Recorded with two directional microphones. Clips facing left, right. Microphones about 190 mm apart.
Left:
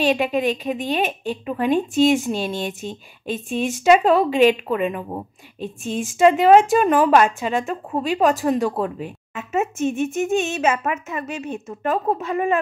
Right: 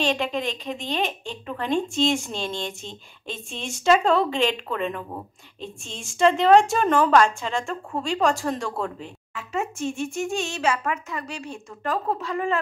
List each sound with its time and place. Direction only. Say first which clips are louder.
0.0 s a woman's voice: left 6 dB; 15° left (ahead or behind)